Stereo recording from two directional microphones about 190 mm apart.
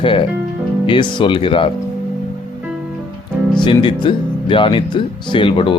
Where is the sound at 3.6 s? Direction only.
25° left (ahead or behind).